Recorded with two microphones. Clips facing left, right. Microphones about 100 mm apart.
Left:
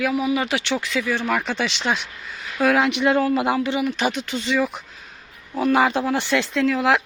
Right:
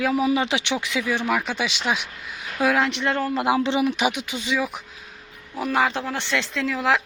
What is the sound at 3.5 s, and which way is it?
Speech, 25° right (ahead or behind).